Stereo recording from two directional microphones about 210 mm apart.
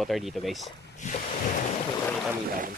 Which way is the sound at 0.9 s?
35° left (ahead or behind).